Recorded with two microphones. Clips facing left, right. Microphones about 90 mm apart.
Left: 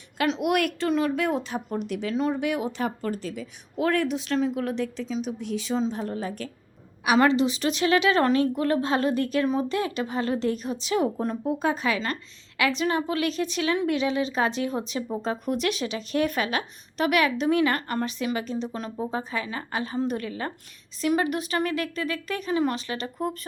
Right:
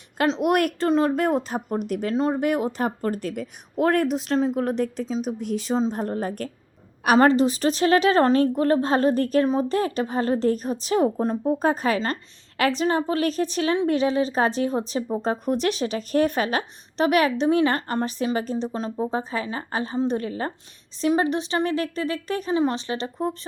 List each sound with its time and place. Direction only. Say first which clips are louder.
0.4 s a woman's voice: right 4 dB; 40° right (ahead or behind)